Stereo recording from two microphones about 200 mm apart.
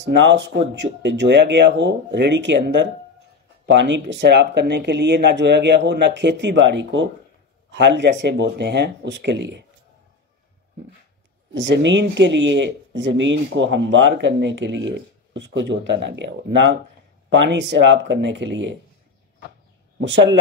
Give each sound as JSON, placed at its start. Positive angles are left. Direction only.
{"t": 0.0, "sound": "speech", "side_deg": -60}
{"t": 11.5, "sound": "speech", "side_deg": -60}
{"t": 20.0, "sound": "speech", "side_deg": -65}